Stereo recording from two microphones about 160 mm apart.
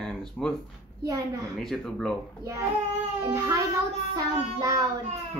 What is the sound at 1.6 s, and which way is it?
Speech, centre (ahead or behind).